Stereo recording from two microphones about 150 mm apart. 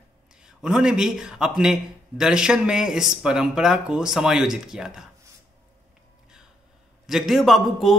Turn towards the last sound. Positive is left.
turn(degrees=0)  # may be behind; listen again after turning